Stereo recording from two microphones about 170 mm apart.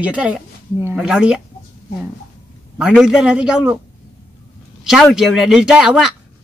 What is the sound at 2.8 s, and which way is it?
A woman's voice, 5° right (ahead or behind).